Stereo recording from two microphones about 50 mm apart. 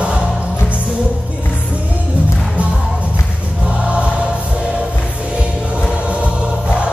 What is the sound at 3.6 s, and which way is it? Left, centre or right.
Choir, right.